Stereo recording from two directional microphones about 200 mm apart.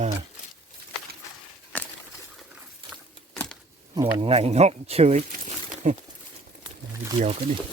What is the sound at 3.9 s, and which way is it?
Speech, 25° right (ahead or behind).